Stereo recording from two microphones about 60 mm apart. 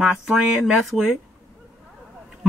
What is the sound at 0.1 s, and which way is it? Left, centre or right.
Speech, centre.